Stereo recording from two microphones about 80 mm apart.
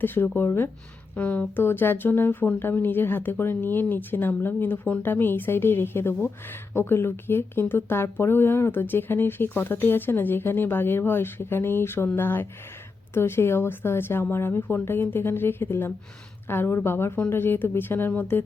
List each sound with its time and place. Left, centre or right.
0.0 s speech: left